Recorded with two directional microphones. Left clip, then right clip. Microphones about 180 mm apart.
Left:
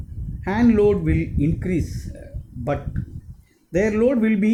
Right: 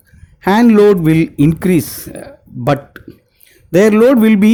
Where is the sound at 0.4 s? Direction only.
50° right (ahead or behind).